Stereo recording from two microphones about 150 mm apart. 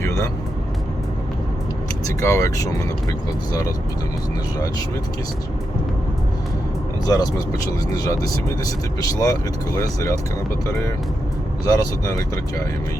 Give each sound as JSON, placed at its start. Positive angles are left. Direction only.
{"t": 0.0, "sound": "vehicle", "side_deg": 20}
{"t": 2.2, "sound": "speech", "side_deg": 20}
{"t": 7.0, "sound": "speech", "side_deg": 25}
{"t": 11.6, "sound": "speech", "side_deg": 25}